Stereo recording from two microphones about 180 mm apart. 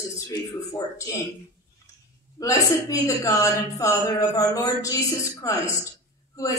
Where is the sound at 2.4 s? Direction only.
20° left (ahead or behind).